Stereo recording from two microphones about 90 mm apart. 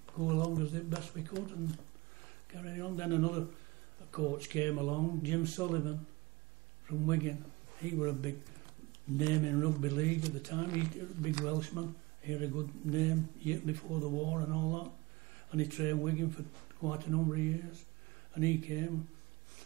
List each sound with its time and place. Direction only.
0.2 s speech: 35° left (ahead or behind)
1.3 s speech: 45° left (ahead or behind)
2.5 s speech: 30° left (ahead or behind)
11.4 s speech: 30° left (ahead or behind)